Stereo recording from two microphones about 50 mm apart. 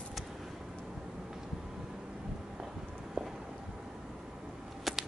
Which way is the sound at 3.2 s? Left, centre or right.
Centre.